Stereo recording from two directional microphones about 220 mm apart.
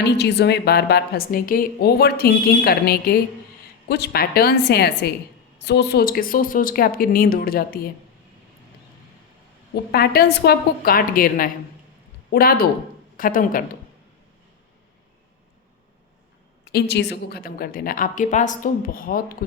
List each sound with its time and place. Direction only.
0.0 s a woman's voice: 50° left (ahead or behind)
9.9 s a woman's voice: 45° left (ahead or behind)
16.7 s a woman's voice: 50° left (ahead or behind)